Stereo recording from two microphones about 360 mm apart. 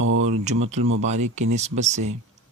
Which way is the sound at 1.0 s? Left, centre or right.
Centre.